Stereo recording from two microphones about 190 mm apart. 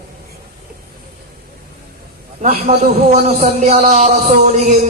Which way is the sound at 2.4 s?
35° right (ahead or behind).